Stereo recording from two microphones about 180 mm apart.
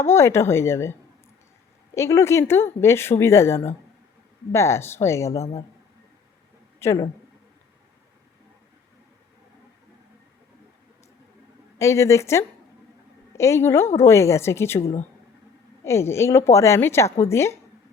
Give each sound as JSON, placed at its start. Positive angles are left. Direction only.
{"t": 0.0, "sound": "a woman's voice", "side_deg": 15}
{"t": 2.0, "sound": "a woman's voice", "side_deg": 15}
{"t": 6.7, "sound": "speech", "side_deg": 20}
{"t": 11.8, "sound": "a woman's voice", "side_deg": 15}